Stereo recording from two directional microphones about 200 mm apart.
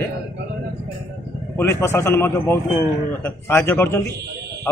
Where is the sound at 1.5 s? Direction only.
10° left (ahead or behind).